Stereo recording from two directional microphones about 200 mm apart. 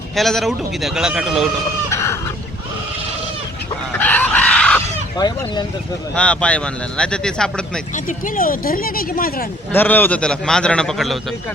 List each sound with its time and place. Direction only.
0.2 s a man's voice: centre (ahead or behind)
1.9 s a sound: 15° left (ahead or behind)
3.9 s screaming: 10° left (ahead or behind)
5.1 s speech: 20° left (ahead or behind)
6.1 s a man's voice: 5° left (ahead or behind)
7.9 s speech: 40° left (ahead or behind)
9.7 s a man's voice: 10° left (ahead or behind)